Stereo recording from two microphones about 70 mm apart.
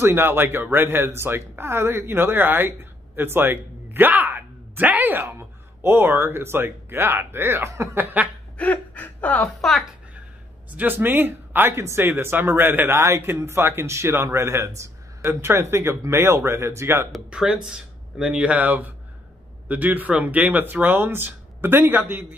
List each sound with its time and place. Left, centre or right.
0.0 s speech: right
8.5 s speech: left
9.6 s a woman's voice: centre
10.8 s speech: right
17.3 s speech: centre